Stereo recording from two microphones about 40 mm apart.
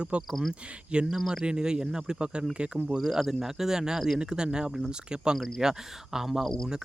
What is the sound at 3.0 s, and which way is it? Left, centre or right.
Speech, centre.